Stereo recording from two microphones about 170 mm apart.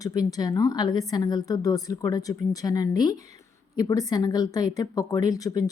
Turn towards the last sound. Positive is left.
turn(degrees=20)  # may be behind; listen again after turning